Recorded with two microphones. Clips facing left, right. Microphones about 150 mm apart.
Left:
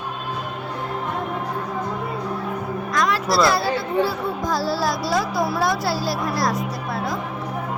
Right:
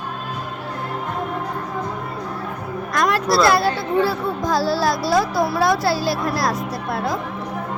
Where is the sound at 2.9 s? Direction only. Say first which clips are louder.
Right 3 dB; 55° right (ahead or behind).